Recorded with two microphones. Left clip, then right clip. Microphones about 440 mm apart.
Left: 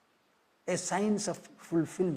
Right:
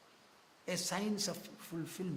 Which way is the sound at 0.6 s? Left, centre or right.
Left.